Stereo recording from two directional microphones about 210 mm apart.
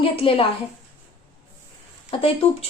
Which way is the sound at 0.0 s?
25° left (ahead or behind).